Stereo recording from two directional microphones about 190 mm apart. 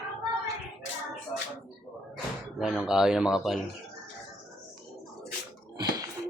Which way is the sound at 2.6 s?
Centre (ahead or behind).